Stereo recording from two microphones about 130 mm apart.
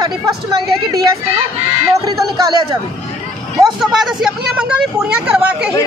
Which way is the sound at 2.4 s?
30° right (ahead or behind).